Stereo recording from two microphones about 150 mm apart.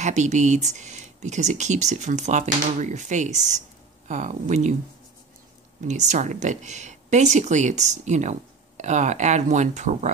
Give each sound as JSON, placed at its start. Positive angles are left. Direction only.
{"t": 0.0, "sound": "speech", "side_deg": -50}
{"t": 5.9, "sound": "speech", "side_deg": -50}